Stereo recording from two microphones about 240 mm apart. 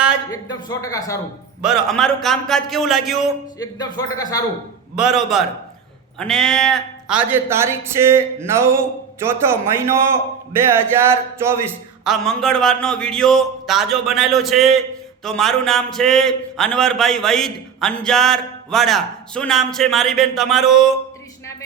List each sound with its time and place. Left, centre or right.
0.3 s speech: centre
1.6 s a man's voice: centre
3.6 s speech: centre
4.9 s a man's voice: centre
12.0 s a man's voice: centre